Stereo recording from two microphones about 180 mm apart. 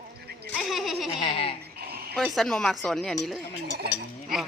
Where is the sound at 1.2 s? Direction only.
30° left (ahead or behind).